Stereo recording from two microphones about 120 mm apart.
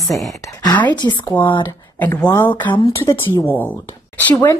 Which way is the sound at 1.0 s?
30° left (ahead or behind).